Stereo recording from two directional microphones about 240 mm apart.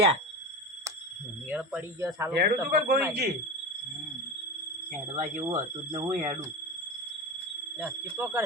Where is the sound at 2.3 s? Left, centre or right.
Right.